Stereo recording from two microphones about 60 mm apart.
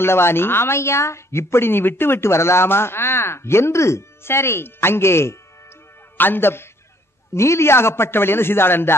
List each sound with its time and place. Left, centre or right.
0.0 s a woman's voice: left
6.1 s a man's voice: left